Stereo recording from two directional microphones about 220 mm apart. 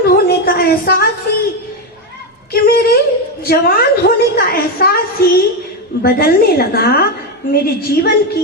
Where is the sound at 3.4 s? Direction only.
45° left (ahead or behind).